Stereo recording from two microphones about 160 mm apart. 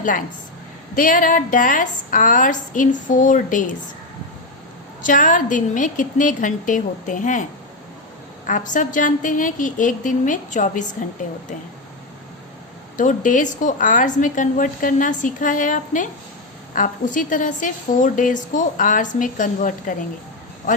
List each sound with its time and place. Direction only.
0.9 s a woman's voice: 55° left (ahead or behind)
5.0 s a woman's voice: 55° left (ahead or behind)
8.4 s a woman's voice: 55° left (ahead or behind)
13.0 s a woman's voice: 55° left (ahead or behind)